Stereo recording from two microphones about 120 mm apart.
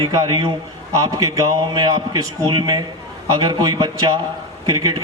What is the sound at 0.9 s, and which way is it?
A man's voice, 25° right (ahead or behind).